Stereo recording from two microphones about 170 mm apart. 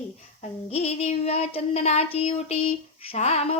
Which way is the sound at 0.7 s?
40° left (ahead or behind).